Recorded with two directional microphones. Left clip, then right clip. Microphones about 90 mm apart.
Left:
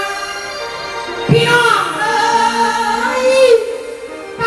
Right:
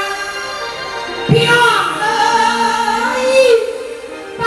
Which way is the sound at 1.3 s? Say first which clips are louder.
Even; 20° left (ahead or behind).